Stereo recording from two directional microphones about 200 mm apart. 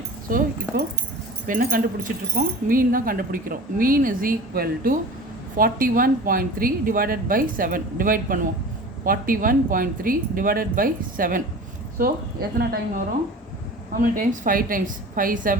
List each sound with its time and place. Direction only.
0.3 s speech: 45° right (ahead or behind)
1.5 s speech: 45° right (ahead or behind)
14.0 s speech: 45° right (ahead or behind)